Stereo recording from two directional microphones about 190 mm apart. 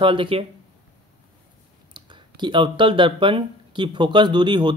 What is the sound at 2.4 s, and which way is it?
Speech, 25° right (ahead or behind).